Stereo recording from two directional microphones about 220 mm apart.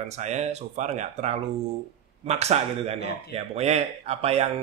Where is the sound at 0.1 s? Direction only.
30° right (ahead or behind).